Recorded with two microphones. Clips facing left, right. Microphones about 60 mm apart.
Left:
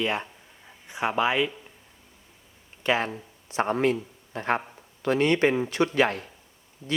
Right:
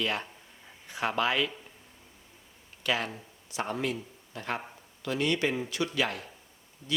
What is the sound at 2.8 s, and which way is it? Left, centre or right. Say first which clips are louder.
Speech: left 5 dB; left.